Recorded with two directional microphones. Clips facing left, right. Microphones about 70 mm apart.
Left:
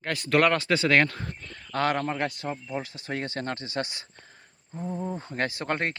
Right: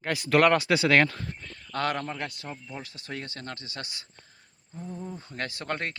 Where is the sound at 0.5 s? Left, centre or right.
Centre.